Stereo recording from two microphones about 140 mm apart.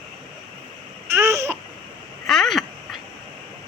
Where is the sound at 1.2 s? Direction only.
20° right (ahead or behind).